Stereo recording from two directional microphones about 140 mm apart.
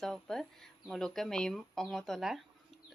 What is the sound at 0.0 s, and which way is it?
Speech, centre (ahead or behind).